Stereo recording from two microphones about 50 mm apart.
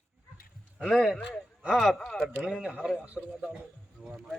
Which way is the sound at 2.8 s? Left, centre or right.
Centre.